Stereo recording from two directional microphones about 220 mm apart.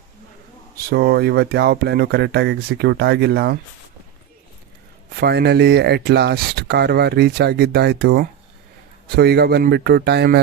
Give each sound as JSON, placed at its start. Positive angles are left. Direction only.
{"t": 0.9, "sound": "speech", "side_deg": -45}
{"t": 5.2, "sound": "speech", "side_deg": -45}